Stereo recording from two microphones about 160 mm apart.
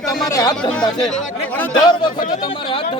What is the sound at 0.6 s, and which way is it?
Speech, 5° left (ahead or behind).